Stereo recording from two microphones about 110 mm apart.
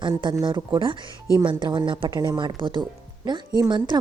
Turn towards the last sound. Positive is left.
turn(degrees=-40)  # may be behind; listen again after turning